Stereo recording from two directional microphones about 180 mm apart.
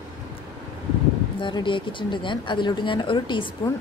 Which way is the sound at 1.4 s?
25° left (ahead or behind).